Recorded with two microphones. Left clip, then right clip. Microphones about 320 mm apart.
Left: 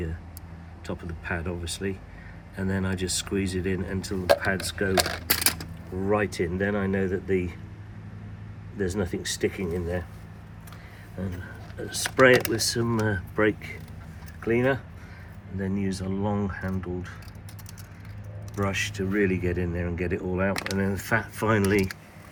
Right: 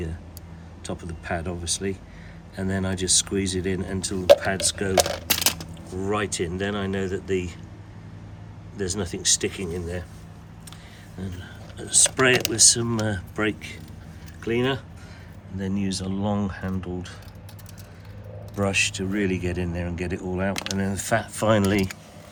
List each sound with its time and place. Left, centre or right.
0.9 s speech: centre
5.3 s coin: centre
6.0 s speech: centre
8.8 s speech: centre
11.8 s speech: centre
15.5 s speech: centre
18.5 s speech: centre